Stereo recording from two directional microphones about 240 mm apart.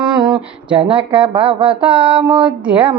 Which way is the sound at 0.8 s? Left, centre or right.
Right.